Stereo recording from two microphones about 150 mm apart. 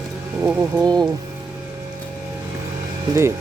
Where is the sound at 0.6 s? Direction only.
25° right (ahead or behind).